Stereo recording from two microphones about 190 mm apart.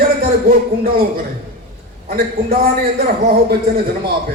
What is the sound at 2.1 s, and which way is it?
Speech, 55° right (ahead or behind).